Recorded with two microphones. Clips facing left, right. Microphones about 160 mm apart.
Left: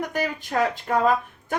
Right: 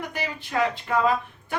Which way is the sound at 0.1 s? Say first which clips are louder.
Left 4 dB; 45° left (ahead or behind).